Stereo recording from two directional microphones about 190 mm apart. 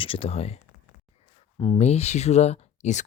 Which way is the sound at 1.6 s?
30° left (ahead or behind).